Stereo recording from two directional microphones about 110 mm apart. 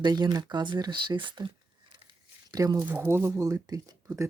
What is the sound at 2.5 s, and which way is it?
Speech, 35° right (ahead or behind).